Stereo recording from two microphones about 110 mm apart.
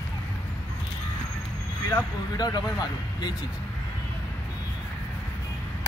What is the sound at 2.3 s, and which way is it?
Speech, 40° left (ahead or behind).